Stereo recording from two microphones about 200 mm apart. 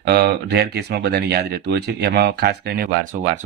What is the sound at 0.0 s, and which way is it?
Speech, 55° right (ahead or behind).